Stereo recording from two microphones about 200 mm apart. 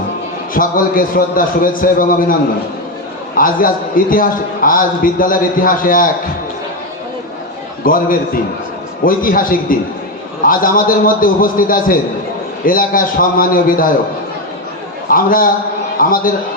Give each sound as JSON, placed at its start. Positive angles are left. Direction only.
{"t": 0.5, "sound": "a man's voice", "side_deg": 45}
{"t": 3.3, "sound": "a man's voice", "side_deg": 45}
{"t": 7.9, "sound": "a man's voice", "side_deg": 45}
{"t": 15.1, "sound": "a man's voice", "side_deg": 45}